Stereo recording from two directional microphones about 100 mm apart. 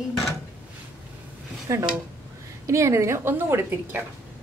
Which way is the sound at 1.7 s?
30° right (ahead or behind).